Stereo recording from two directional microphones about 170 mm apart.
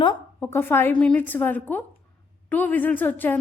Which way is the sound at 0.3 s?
10° left (ahead or behind).